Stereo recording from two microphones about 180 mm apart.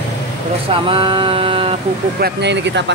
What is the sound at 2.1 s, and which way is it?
Speech, 65° right (ahead or behind).